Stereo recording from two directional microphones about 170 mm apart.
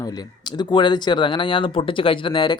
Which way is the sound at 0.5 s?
25° left (ahead or behind).